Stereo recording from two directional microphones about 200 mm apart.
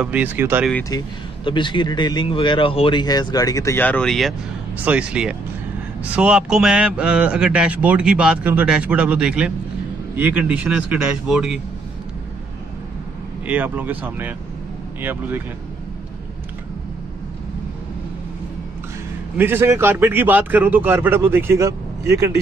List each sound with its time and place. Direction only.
0.0 s a man's voice: 5° right (ahead or behind)
0.8 s speech: 20° left (ahead or behind); by 11.6 s 5° right (ahead or behind)
13.5 s a man's voice: 10° right (ahead or behind)
19.3 s a man's voice: 10° right (ahead or behind)